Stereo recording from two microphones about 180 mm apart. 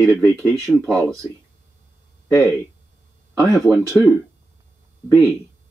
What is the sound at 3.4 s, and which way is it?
Speech, centre (ahead or behind).